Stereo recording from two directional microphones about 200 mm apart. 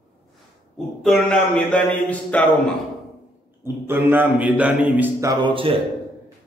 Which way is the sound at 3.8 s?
10° right (ahead or behind).